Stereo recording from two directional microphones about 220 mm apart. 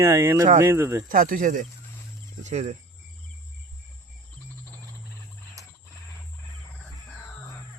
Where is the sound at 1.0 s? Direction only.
40° right (ahead or behind).